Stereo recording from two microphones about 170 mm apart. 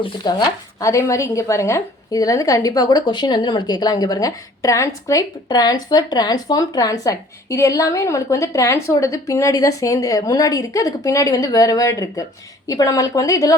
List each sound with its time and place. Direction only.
0.0 s speech: 25° left (ahead or behind)